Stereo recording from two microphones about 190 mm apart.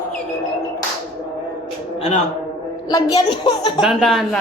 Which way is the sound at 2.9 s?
20° left (ahead or behind).